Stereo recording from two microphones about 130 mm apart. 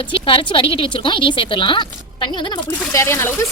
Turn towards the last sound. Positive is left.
turn(degrees=20)  # may be behind; listen again after turning